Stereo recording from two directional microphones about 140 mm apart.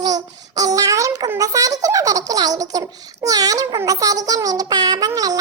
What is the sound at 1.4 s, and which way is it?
Giggle, 25° right (ahead or behind).